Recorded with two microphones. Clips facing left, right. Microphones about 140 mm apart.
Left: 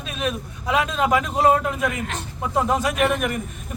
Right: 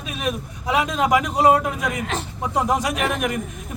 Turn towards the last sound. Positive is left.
turn(degrees=-10)  # may be behind; listen again after turning